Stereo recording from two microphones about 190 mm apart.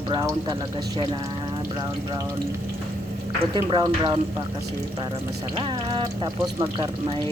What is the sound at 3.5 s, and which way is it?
Speech, 25° right (ahead or behind).